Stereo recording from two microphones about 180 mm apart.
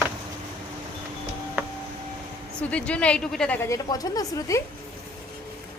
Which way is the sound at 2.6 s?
5° left (ahead or behind).